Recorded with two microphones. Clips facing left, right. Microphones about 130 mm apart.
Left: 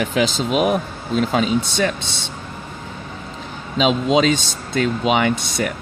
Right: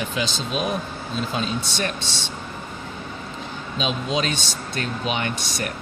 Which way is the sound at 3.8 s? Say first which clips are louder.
Left 9 dB; 90° left.